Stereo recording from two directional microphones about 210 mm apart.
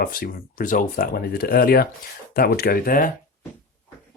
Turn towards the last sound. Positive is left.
turn(degrees=40)  # may be behind; listen again after turning